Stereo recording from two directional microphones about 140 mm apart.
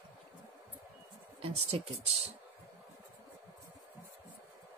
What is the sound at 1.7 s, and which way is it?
Speech, 45° right (ahead or behind).